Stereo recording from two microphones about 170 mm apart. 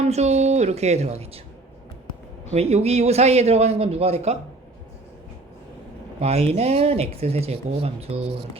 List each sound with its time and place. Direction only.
0.0 s speech: 40° right (ahead or behind)
2.5 s speech: 40° right (ahead or behind)
6.1 s speech: 40° right (ahead or behind)